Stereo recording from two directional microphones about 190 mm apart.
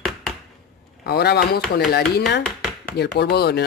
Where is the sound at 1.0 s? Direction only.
60° left (ahead or behind).